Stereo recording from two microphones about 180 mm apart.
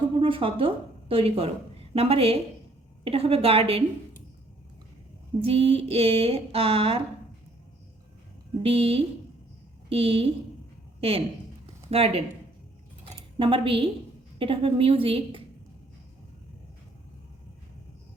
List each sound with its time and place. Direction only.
0.2 s a woman's voice: 30° right (ahead or behind)
5.4 s a woman's voice: 30° right (ahead or behind)
8.6 s a woman's voice: 35° right (ahead or behind)
11.6 s a sound: 35° right (ahead or behind)
14.3 s a woman's voice: 30° right (ahead or behind)